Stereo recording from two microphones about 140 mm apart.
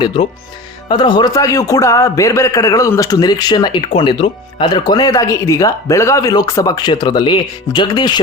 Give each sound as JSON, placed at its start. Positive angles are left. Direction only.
{"t": 0.9, "sound": "a man's voice", "side_deg": 35}